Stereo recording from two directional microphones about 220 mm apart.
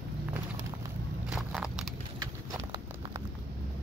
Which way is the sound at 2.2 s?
15° right (ahead or behind).